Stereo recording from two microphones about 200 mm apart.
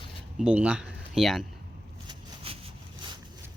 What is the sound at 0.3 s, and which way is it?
Speech, 5° right (ahead or behind).